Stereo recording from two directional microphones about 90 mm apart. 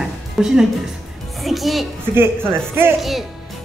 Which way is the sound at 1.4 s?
Centre (ahead or behind).